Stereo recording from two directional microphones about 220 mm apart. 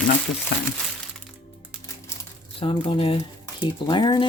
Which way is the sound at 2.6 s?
25° left (ahead or behind).